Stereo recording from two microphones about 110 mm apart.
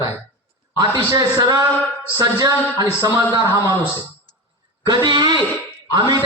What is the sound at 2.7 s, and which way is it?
Speech, 35° right (ahead or behind).